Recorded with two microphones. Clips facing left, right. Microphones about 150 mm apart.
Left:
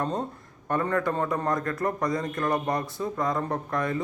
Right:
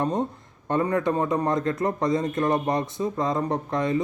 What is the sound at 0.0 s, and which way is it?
A man's voice, 20° right (ahead or behind).